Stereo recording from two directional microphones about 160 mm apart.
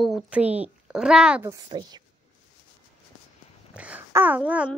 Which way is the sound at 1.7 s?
25° right (ahead or behind).